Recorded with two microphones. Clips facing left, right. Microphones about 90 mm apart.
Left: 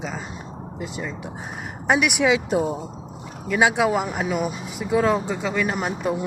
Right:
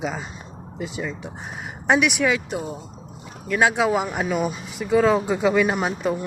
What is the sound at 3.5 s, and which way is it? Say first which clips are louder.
Speech: even; 10° left (ahead or behind).